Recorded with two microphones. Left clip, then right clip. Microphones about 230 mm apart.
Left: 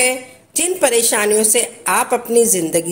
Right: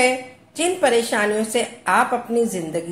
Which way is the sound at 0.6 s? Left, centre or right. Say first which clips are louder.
Left 2 dB; left.